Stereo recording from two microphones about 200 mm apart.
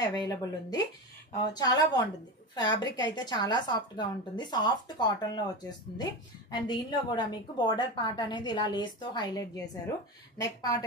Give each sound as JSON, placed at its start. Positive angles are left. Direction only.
{"t": 0.0, "sound": "a woman's voice", "side_deg": 20}
{"t": 6.5, "sound": "a woman's voice", "side_deg": 20}